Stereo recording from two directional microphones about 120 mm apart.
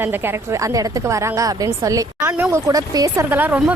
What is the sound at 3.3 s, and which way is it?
Speech, 15° right (ahead or behind).